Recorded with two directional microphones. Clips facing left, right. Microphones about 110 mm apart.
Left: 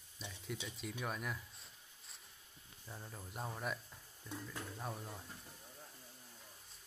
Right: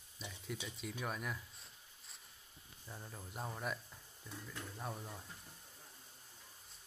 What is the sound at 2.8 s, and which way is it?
Speech, centre (ahead or behind).